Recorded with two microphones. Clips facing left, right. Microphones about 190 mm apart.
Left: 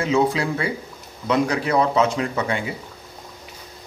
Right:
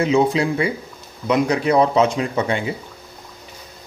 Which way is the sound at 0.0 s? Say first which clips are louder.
Right 3 dB; 20° right (ahead or behind).